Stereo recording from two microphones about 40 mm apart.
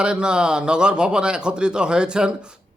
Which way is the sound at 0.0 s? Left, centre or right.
Right.